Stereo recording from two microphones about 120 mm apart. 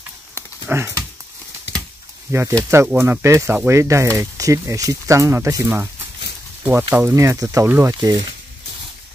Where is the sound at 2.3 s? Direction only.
20° right (ahead or behind).